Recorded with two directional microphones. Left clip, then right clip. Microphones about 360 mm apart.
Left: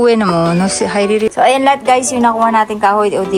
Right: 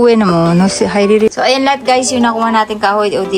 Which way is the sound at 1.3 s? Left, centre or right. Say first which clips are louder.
Left 2 dB; centre.